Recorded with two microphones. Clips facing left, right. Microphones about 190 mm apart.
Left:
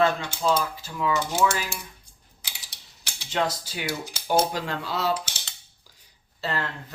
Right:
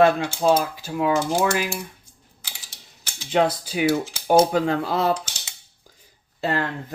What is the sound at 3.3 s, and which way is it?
Cutlery, 60° right (ahead or behind).